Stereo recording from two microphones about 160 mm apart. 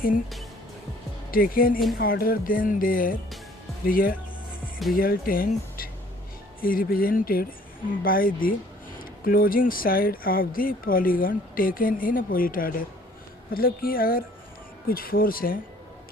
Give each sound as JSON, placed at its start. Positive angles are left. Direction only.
{"t": 1.3, "sound": "speech", "side_deg": 65}